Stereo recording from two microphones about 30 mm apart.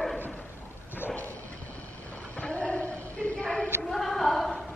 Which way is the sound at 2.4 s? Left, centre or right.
Left.